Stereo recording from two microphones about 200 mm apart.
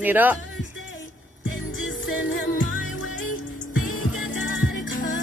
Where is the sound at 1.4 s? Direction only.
70° left (ahead or behind).